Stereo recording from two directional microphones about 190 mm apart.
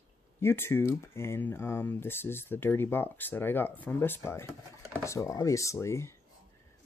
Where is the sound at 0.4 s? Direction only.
10° left (ahead or behind).